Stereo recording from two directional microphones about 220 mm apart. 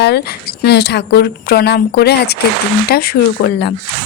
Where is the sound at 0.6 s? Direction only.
50° left (ahead or behind).